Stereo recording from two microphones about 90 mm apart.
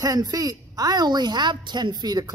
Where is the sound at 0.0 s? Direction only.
45° right (ahead or behind).